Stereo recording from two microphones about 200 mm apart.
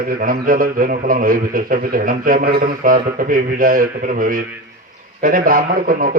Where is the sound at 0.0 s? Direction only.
45° right (ahead or behind).